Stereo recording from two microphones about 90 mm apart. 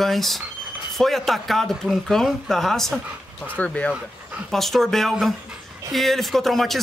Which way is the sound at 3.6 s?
15° left (ahead or behind).